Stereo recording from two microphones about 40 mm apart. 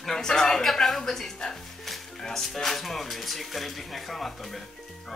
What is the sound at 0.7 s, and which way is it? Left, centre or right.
Speech, centre.